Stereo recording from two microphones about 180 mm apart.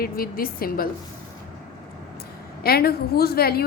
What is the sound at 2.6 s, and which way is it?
Speech, 60° left (ahead or behind).